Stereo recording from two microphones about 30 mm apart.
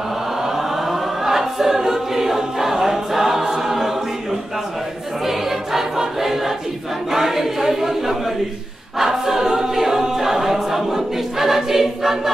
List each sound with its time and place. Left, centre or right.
0.4 s choir: centre
5.2 s choir: centre